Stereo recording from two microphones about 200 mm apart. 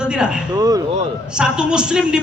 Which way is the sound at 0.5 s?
20° right (ahead or behind).